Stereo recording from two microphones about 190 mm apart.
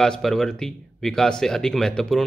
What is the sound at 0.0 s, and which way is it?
A man's voice, 5° left (ahead or behind).